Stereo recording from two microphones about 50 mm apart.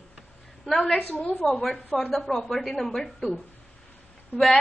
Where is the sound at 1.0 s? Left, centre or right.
Left.